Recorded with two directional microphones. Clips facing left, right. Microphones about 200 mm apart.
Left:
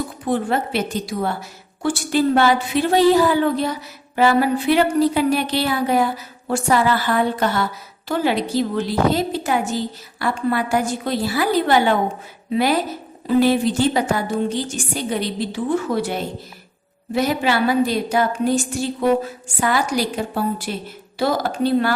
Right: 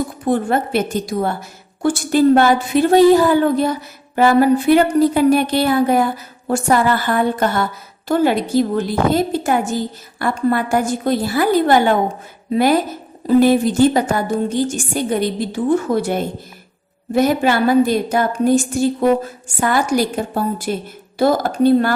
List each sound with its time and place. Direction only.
0.3 s a woman's voice: 50° right (ahead or behind)